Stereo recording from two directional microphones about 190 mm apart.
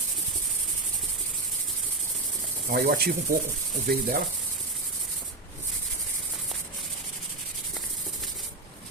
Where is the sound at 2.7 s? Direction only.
50° right (ahead or behind).